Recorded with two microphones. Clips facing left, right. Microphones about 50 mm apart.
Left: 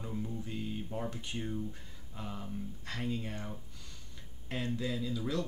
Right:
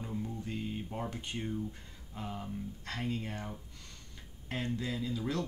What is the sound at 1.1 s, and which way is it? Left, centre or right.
Speech, centre.